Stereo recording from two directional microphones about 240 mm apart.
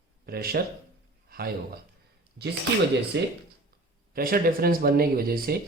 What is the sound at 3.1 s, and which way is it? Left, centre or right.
Speech, right.